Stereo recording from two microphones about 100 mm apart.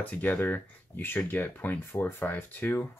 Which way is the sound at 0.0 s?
15° left (ahead or behind).